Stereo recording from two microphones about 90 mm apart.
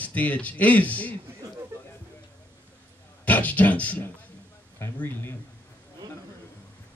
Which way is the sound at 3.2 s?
20° left (ahead or behind).